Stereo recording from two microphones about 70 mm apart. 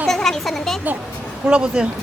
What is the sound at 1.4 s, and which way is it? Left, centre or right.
Speech, centre.